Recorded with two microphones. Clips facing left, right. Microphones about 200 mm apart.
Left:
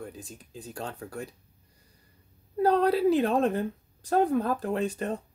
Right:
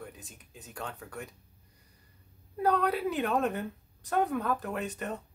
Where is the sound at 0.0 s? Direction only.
30° left (ahead or behind).